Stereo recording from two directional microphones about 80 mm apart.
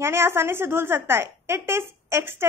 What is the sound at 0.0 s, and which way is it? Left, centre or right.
A woman's voice, right.